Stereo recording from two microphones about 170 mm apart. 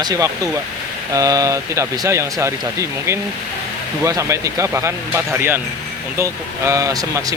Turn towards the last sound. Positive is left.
turn(degrees=-20)  # may be behind; listen again after turning